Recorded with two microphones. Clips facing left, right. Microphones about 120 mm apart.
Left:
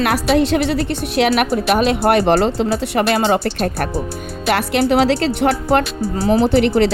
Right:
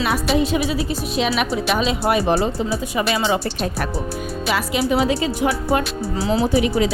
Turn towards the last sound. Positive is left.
turn(degrees=65)  # may be behind; listen again after turning